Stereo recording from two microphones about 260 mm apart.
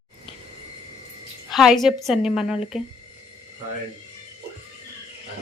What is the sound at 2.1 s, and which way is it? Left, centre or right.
Speech, centre.